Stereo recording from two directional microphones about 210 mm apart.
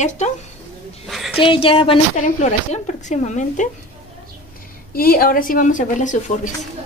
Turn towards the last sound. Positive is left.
turn(degrees=35)  # may be behind; listen again after turning